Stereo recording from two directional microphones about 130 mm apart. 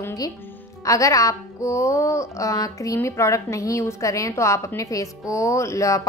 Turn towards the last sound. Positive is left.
turn(degrees=25)  # may be behind; listen again after turning